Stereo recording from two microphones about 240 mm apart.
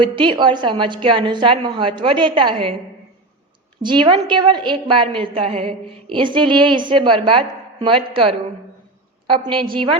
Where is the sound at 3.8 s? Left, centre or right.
Centre.